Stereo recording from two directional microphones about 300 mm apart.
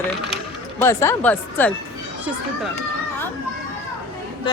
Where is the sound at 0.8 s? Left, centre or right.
Centre.